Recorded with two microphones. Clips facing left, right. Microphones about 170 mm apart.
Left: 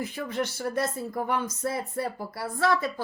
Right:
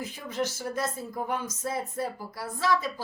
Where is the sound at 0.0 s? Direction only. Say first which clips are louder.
Left 2 dB; 60° left (ahead or behind).